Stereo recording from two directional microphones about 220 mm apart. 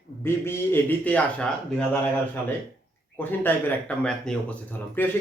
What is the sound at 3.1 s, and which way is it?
Speech, 5° left (ahead or behind).